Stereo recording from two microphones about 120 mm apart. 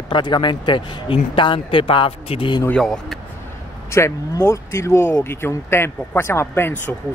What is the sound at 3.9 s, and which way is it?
Speech, 25° left (ahead or behind).